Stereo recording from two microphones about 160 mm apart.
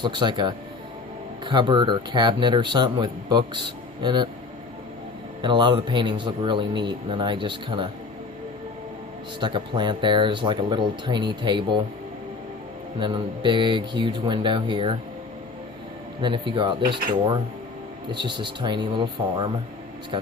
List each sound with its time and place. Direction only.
0.0 s a man's voice: 30° right (ahead or behind)
5.4 s a man's voice: 30° right (ahead or behind)
9.4 s speech: 30° right (ahead or behind)
13.0 s speech: 30° right (ahead or behind)
16.2 s speech: 30° right (ahead or behind)
18.1 s a man's voice: 30° right (ahead or behind)